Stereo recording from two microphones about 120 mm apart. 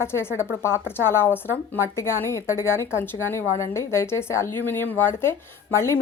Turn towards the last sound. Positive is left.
turn(degrees=20)  # may be behind; listen again after turning